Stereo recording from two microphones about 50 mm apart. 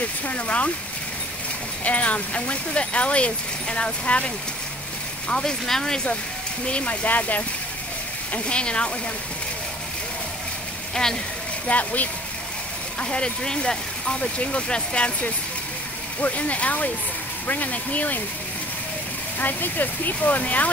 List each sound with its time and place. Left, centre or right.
0.3 s speech: left
1.9 s speech: left
5.3 s speech: centre
6.7 s speech: left
8.3 s speech: left
11.6 s speech: left
13.0 s speech: centre
19.4 s speech: left